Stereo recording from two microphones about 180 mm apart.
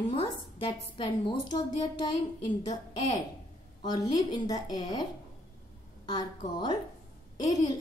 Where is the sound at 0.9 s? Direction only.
25° left (ahead or behind).